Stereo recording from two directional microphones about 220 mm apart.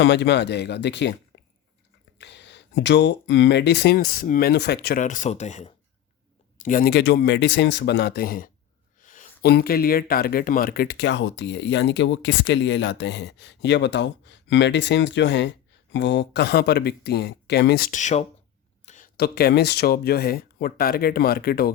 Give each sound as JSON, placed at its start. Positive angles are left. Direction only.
{"t": 0.0, "sound": "speech", "side_deg": 55}